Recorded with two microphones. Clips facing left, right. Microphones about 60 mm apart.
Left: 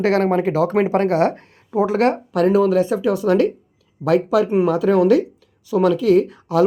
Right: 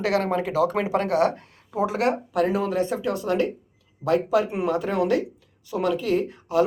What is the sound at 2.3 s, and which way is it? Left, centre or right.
Speech, left.